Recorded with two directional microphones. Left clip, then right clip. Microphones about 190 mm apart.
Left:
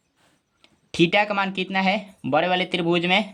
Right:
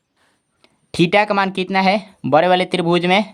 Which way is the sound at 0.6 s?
30° right (ahead or behind).